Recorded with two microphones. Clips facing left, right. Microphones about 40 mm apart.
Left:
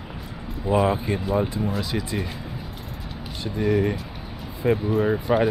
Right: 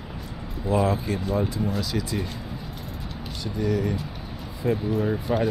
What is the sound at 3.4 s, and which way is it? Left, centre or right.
Speech, left.